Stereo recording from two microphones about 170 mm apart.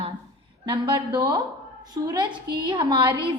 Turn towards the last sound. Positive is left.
turn(degrees=-25)  # may be behind; listen again after turning